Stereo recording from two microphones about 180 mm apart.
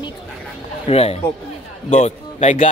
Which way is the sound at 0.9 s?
35° left (ahead or behind).